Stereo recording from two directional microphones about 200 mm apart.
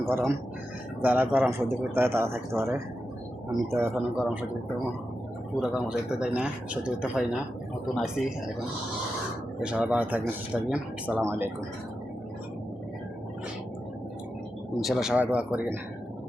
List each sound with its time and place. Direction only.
0.1 s speech: 10° right (ahead or behind)
5.5 s speech: 5° right (ahead or behind)
9.6 s speech: 5° right (ahead or behind)
14.8 s speech: centre (ahead or behind)